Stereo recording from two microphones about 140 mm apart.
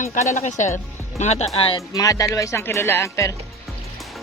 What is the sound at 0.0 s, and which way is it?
Speech, 55° left (ahead or behind).